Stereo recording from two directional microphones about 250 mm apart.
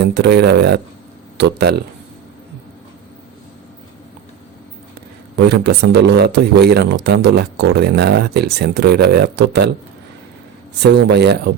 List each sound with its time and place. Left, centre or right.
0.0 s speech: right
5.4 s speech: right
10.8 s speech: right